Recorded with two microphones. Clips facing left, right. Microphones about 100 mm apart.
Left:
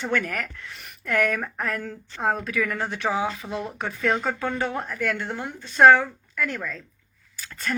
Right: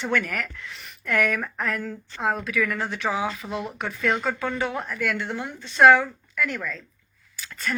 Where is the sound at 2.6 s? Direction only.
30° left (ahead or behind).